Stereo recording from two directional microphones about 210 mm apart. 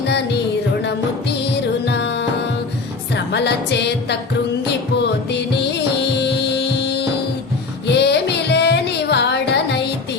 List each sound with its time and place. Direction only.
1.5 s music: 55° left (ahead or behind)
3.3 s music: 55° left (ahead or behind)
5.3 s music: 55° left (ahead or behind)